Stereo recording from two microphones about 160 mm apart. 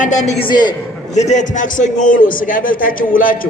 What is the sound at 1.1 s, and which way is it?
A man's voice, 45° left (ahead or behind).